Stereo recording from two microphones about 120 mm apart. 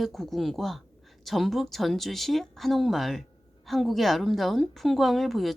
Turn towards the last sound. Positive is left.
turn(degrees=0)  # may be behind; listen again after turning